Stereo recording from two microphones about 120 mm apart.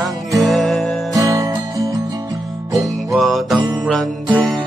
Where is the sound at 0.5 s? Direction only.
Centre (ahead or behind).